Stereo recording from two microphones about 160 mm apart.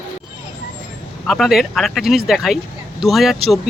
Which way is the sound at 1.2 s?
Centre (ahead or behind).